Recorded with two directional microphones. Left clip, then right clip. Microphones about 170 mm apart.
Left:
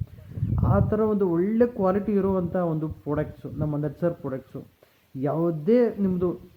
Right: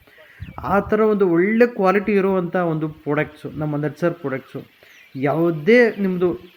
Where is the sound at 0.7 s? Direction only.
15° right (ahead or behind).